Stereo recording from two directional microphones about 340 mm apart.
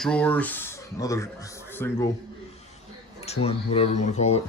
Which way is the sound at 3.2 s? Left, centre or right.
Centre.